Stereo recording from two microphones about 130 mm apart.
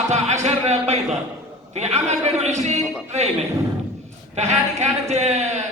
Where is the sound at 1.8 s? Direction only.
60° right (ahead or behind).